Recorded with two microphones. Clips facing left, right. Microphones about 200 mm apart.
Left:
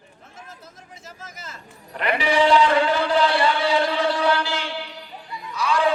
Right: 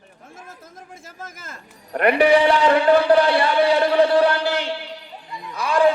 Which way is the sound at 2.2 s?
60° right (ahead or behind).